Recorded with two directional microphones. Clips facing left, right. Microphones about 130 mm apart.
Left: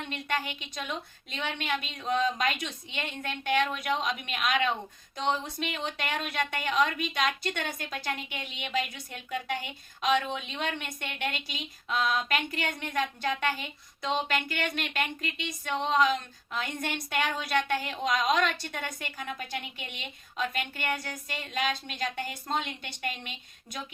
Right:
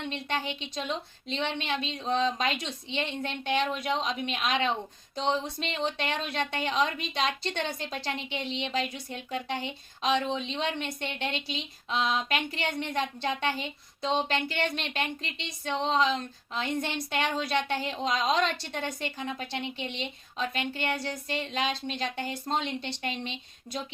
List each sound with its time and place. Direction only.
0.1 s speech: 25° right (ahead or behind)